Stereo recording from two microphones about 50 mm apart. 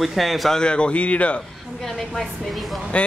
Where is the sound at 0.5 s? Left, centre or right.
Centre.